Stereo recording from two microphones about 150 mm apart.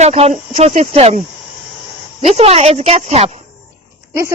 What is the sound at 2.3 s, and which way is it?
Speech, 45° right (ahead or behind).